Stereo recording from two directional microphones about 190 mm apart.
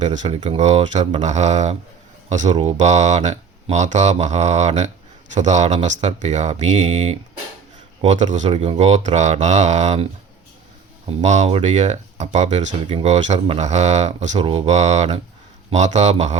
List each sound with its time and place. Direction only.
0.1 s speech: 40° right (ahead or behind)